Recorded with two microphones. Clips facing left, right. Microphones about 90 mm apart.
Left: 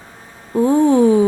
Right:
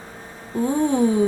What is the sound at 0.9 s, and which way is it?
Speech, 90° left.